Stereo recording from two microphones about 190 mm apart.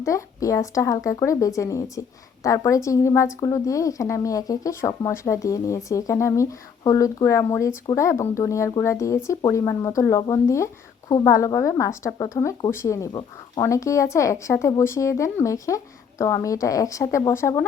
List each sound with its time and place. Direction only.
0.0 s speech: 15° left (ahead or behind)